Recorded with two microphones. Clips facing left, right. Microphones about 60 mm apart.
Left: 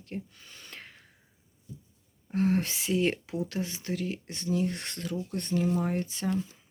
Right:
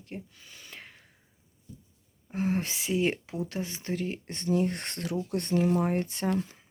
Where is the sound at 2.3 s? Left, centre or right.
Centre; by 6.5 s right.